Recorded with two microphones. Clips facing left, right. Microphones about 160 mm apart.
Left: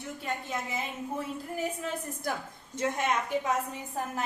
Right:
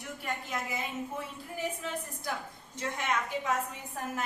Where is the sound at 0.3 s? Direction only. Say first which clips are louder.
Left 1 dB; 25° left (ahead or behind).